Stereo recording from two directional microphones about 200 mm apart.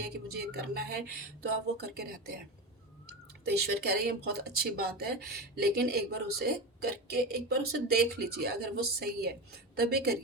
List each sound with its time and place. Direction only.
0.1 s speech: 50° right (ahead or behind)
3.4 s speech: 55° right (ahead or behind)